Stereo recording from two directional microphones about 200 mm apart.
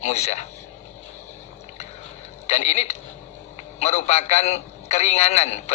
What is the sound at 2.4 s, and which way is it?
A man's voice, 35° left (ahead or behind).